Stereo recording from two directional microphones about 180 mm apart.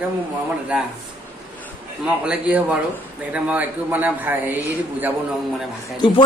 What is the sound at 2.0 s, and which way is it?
A man's voice, 5° right (ahead or behind).